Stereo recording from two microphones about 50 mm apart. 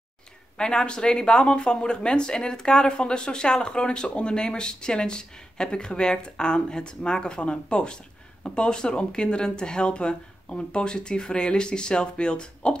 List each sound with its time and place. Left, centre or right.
0.6 s speech: centre